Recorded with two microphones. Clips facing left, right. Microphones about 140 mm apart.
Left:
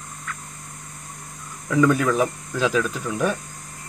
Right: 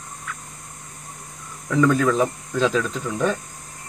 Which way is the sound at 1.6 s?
5° left (ahead or behind).